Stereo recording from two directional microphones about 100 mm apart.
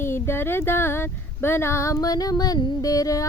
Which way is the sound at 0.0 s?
25° left (ahead or behind).